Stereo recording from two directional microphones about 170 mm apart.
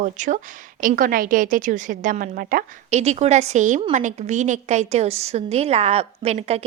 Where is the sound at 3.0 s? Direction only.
40° right (ahead or behind).